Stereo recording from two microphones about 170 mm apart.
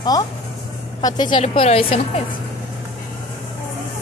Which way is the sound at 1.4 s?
35° left (ahead or behind).